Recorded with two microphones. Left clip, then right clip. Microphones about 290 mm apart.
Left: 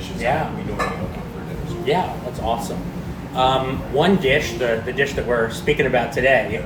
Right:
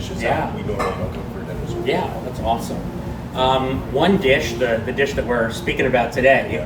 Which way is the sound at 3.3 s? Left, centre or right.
Centre.